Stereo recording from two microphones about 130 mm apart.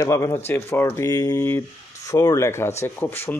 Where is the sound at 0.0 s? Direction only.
25° left (ahead or behind).